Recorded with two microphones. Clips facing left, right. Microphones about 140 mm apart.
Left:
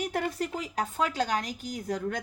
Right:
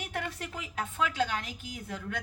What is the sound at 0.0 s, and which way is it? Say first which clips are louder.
A woman's voice: left 7 dB; 40° left (ahead or behind).